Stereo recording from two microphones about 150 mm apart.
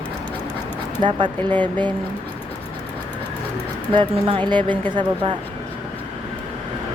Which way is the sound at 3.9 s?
35° right (ahead or behind).